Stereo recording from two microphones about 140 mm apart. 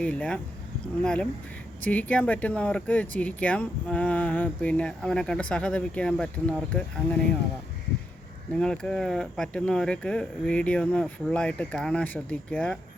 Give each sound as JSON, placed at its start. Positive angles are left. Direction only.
{"t": 0.0, "sound": "speech", "side_deg": 10}
{"t": 8.5, "sound": "speech", "side_deg": 5}